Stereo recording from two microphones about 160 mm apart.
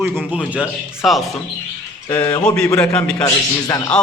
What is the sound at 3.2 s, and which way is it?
Speech, 20° left (ahead or behind).